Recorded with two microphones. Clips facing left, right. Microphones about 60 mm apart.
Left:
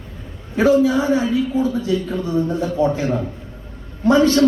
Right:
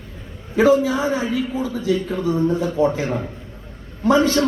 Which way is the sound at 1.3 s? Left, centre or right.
Right.